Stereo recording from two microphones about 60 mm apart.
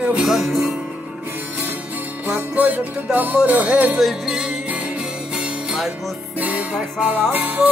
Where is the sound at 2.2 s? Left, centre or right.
Right.